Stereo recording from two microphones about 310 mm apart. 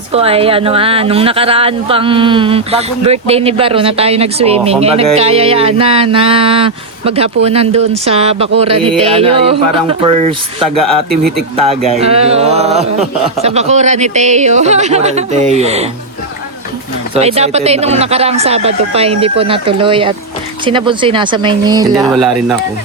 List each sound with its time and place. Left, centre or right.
0.1 s speech: centre
11.2 s speech: centre
11.9 s speech: centre
17.2 s speech: centre
22.2 s speech: centre